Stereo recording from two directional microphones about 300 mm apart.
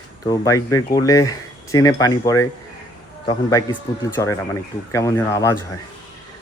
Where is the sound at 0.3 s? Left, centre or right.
Centre.